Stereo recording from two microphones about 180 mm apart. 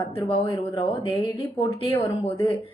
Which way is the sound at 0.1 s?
30° left (ahead or behind).